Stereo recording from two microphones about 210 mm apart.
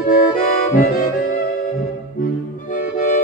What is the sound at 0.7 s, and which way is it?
Music, 40° left (ahead or behind).